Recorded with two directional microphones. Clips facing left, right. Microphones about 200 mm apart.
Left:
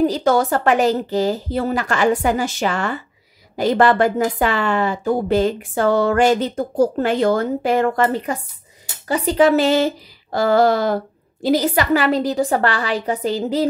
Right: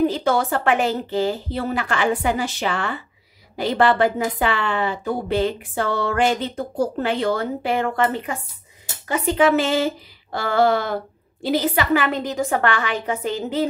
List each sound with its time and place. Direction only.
0.0 s a woman's voice: 40° left (ahead or behind)